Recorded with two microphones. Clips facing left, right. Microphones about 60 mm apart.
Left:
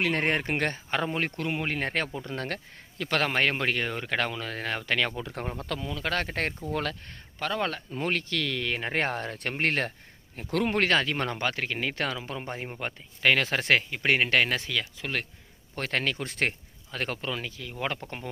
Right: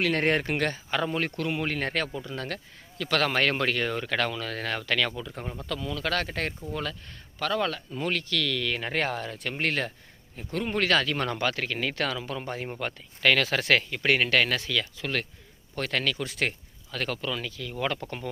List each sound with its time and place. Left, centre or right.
0.0 s speech: left
2.2 s speech: left
3.0 s speech: left
5.2 s speech: left
5.8 s speech: left
6.7 s speech: left
7.3 s speech: left
7.7 s speech: left
10.5 s speech: left
10.8 s speech: left
15.7 s speech: left